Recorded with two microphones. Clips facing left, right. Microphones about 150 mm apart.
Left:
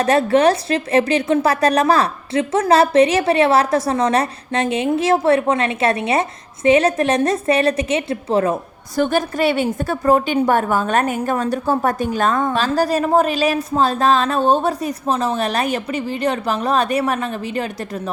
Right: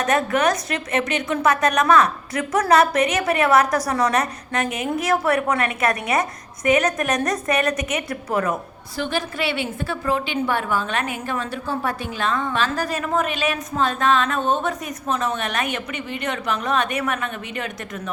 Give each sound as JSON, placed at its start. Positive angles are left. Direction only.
{"t": 0.0, "sound": "a woman's voice", "side_deg": 30}
{"t": 9.0, "sound": "a woman's voice", "side_deg": 45}